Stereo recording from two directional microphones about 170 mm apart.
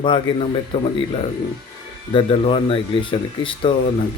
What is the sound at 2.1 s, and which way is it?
Speech, 35° left (ahead or behind).